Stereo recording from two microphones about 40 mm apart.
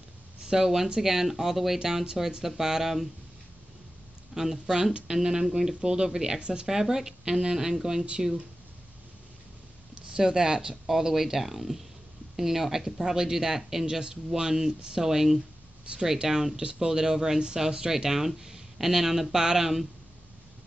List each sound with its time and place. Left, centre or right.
0.5 s speech: centre
4.3 s speech: centre
10.1 s speech: centre
15.9 s speech: right
16.3 s speech: centre